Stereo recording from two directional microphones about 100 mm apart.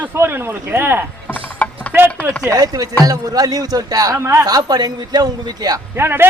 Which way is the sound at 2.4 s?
35° right (ahead or behind).